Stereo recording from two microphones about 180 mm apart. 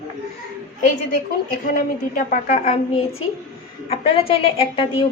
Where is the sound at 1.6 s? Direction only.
50° left (ahead or behind).